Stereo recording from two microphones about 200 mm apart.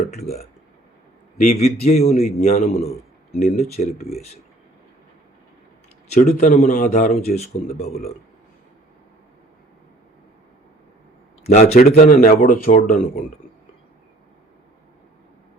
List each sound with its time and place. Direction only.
1.5 s a man's voice: 30° left (ahead or behind)
6.1 s a man's voice: 35° left (ahead or behind)
11.4 s a man's voice: 30° left (ahead or behind)
11.8 s speech: 45° left (ahead or behind)